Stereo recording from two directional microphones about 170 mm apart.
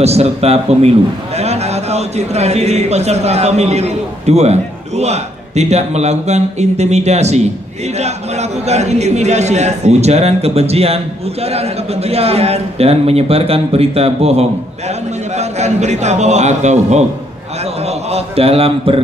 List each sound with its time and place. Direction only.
0.0 s a man's voice: 40° right (ahead or behind)